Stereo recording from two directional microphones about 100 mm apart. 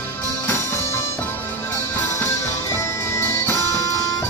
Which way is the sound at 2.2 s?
30° left (ahead or behind).